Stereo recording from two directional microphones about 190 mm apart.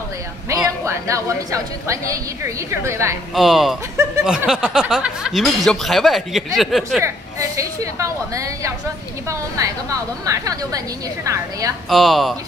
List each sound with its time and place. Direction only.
0.7 s a woman's voice: 15° right (ahead or behind)
3.3 s speech: centre (ahead or behind)
7.0 s a woman's voice: 15° right (ahead or behind)
11.9 s speech: centre (ahead or behind)